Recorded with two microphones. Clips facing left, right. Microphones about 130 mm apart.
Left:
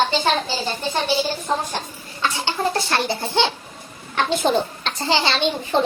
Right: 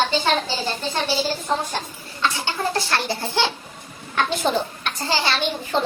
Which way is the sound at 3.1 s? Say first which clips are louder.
Left 2 dB; 20° left (ahead or behind).